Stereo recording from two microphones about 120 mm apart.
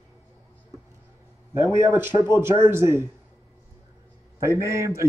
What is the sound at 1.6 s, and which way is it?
Speech, 20° right (ahead or behind).